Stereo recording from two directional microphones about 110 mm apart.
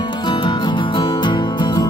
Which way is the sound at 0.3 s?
45° left (ahead or behind).